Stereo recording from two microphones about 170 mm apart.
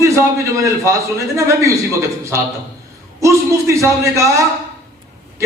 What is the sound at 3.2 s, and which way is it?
A man's voice, 15° right (ahead or behind).